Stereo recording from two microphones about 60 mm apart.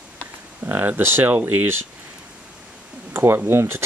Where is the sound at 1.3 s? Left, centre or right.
Right.